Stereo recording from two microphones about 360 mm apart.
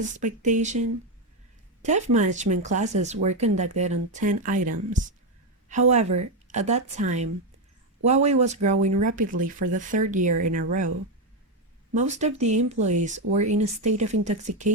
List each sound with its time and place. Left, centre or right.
0.0 s speech: right
1.8 s speech: centre
11.9 s speech: centre